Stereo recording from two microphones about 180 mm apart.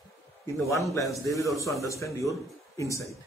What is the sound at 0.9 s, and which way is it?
A man's voice, 20° left (ahead or behind).